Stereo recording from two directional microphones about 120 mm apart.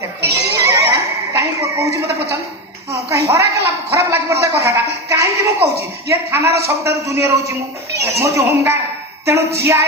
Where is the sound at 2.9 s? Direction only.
25° right (ahead or behind).